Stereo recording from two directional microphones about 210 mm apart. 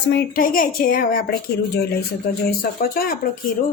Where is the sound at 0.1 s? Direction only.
45° left (ahead or behind).